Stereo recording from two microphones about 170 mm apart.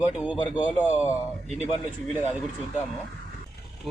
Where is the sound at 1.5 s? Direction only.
40° left (ahead or behind).